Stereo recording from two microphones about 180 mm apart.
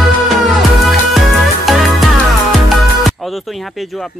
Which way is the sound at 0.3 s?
Centre (ahead or behind).